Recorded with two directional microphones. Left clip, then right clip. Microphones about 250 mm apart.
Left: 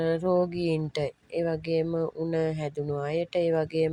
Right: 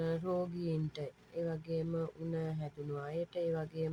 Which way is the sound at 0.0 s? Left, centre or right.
Left.